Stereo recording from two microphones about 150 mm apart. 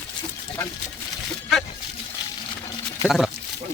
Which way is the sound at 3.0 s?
Centre (ahead or behind).